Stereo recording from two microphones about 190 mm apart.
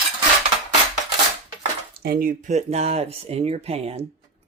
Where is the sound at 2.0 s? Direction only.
50° right (ahead or behind).